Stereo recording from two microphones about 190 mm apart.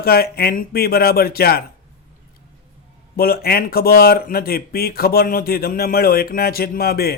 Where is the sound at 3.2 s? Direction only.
50° left (ahead or behind).